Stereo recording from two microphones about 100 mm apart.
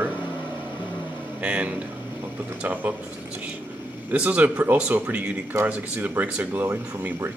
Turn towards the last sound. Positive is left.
turn(degrees=-20)  # may be behind; listen again after turning